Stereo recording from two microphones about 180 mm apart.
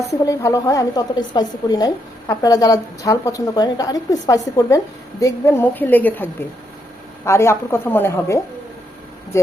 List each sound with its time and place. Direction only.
0.1 s a woman's voice: 15° left (ahead or behind)
7.3 s a woman's voice: 15° left (ahead or behind)